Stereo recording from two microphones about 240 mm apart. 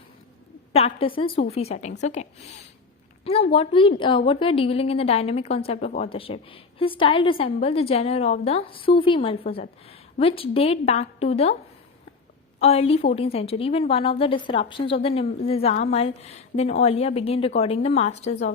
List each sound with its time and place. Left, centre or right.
0.7 s a woman's voice: left
3.2 s a woman's voice: left
12.5 s a woman's voice: left